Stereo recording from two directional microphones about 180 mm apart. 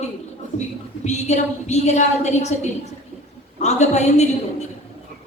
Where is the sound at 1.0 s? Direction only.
40° left (ahead or behind).